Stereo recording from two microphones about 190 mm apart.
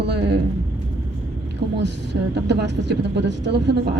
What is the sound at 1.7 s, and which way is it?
A woman's voice, 65° right (ahead or behind).